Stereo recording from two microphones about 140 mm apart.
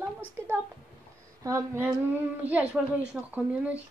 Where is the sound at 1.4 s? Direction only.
20° right (ahead or behind).